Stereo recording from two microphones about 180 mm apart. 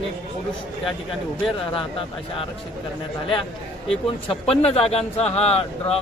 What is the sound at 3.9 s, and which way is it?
Speech, 35° left (ahead or behind).